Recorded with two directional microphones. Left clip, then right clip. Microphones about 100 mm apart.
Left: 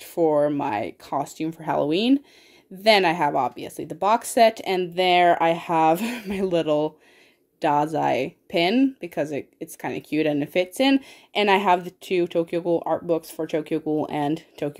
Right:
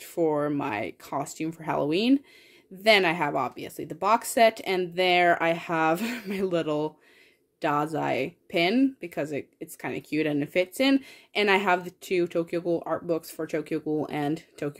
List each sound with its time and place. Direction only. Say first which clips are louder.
0.0 s speech: left 6 dB; 15° left (ahead or behind)